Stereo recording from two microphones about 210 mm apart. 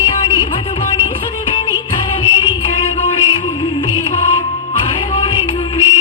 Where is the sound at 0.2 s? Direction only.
25° left (ahead or behind).